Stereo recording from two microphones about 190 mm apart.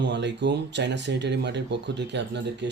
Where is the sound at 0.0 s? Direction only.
65° right (ahead or behind).